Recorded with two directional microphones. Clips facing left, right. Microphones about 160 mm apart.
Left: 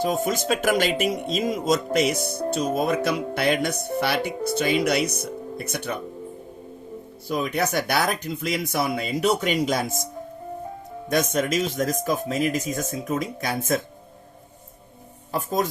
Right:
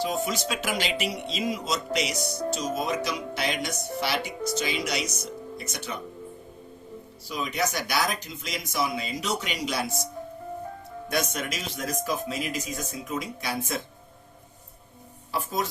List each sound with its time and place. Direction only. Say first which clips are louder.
0.0 s speech: left 4 dB; 50° left (ahead or behind)
7.3 s speech: left 5 dB; 55° left (ahead or behind)
11.1 s speech: left 7 dB; 45° left (ahead or behind)
15.3 s speech: left 5 dB; 45° left (ahead or behind)